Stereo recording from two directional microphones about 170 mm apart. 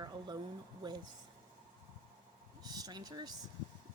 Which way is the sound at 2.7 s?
25° right (ahead or behind).